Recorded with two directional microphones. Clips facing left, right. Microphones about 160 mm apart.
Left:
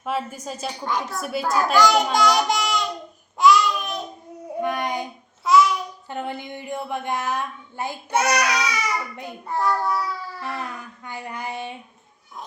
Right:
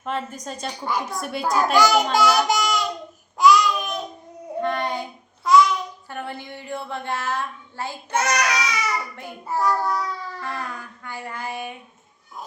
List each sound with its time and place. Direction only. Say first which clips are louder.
0.0 s speech: left 1 dB; 5° left (ahead or behind)
3.3 s babbling: even; centre (ahead or behind)
4.6 s child singing: even; 10° left (ahead or behind)
5.4 s babbling: right 1 dB; 5° left (ahead or behind)
6.1 s speech: left 3 dB; 20° left (ahead or behind)
9.5 s speech: right 1 dB; centre (ahead or behind); by 11.8 s 25° left (ahead or behind)